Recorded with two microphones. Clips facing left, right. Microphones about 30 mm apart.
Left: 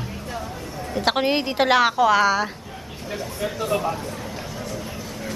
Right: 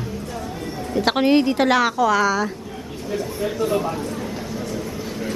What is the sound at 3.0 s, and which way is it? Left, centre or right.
Speech, centre.